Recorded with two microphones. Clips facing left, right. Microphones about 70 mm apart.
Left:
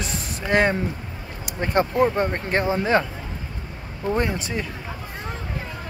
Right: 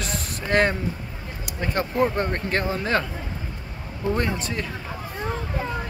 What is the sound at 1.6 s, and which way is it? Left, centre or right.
Speech, left.